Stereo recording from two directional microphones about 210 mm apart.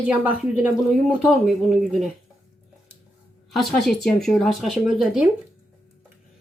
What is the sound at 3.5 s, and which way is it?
Speech, centre (ahead or behind).